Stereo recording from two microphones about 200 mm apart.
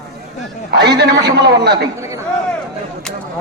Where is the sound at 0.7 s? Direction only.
55° right (ahead or behind).